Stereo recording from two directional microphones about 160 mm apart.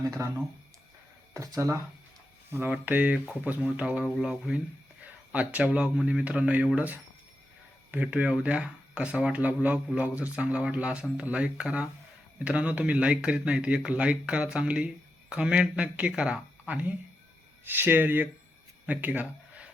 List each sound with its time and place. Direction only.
0.2 s speech: 15° right (ahead or behind)